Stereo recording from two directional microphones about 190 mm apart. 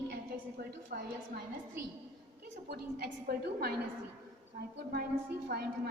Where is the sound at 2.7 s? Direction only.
55° right (ahead or behind).